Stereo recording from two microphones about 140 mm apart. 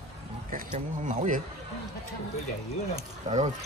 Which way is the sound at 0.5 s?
65° right (ahead or behind).